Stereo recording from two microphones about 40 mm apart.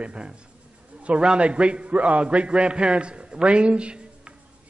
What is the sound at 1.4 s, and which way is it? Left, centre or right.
A man's voice, right.